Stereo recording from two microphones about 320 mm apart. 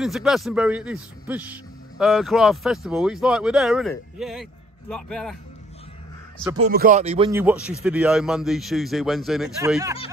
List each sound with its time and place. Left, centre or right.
0.0 s a man's voice: centre
6.6 s a man's voice: right; by 9.9 s centre